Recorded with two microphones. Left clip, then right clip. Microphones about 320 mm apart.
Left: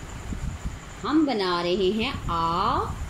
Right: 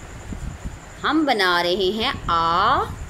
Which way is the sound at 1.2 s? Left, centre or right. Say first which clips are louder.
Right 6 dB; right.